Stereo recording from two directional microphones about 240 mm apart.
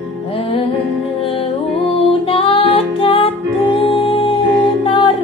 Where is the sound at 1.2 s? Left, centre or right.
Left.